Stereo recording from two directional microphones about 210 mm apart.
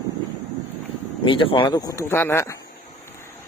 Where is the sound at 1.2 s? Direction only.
25° left (ahead or behind).